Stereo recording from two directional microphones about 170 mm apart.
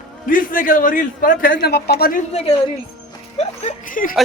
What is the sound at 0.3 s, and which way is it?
A man's voice, 55° left (ahead or behind).